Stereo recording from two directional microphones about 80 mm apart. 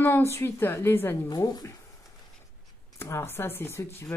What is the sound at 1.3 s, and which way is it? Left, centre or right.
Speech, left.